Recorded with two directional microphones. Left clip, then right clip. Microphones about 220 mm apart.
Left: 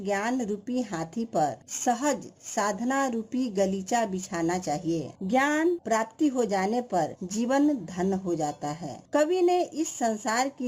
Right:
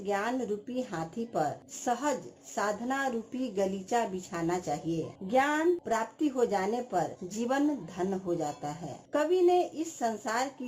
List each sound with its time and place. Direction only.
0.0 s speech: 45° left (ahead or behind)